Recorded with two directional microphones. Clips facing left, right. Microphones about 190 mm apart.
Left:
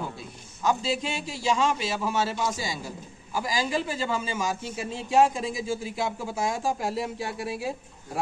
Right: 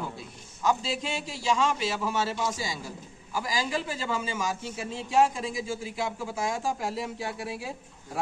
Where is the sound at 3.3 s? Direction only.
25° left (ahead or behind).